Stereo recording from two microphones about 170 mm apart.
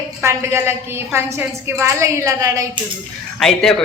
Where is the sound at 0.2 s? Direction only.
15° right (ahead or behind).